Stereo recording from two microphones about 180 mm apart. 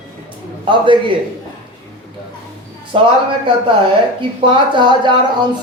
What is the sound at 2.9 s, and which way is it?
Speech, 30° right (ahead or behind).